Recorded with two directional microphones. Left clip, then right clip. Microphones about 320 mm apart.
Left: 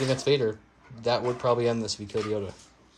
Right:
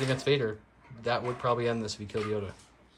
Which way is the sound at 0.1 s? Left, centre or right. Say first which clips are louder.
Left 4 dB; centre.